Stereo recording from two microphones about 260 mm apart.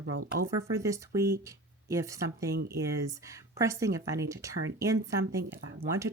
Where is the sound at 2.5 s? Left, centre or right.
Right.